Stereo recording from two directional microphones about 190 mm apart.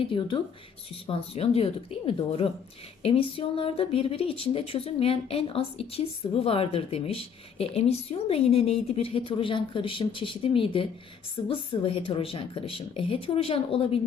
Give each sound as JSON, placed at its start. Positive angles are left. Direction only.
{"t": 0.0, "sound": "speech", "side_deg": 25}